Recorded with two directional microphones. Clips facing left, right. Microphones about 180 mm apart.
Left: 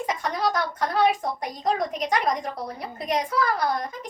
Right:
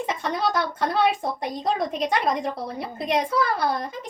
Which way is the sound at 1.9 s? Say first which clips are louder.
Right 1 dB; 25° right (ahead or behind).